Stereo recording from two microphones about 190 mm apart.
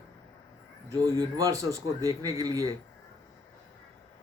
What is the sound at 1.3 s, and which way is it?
Speech, 15° right (ahead or behind).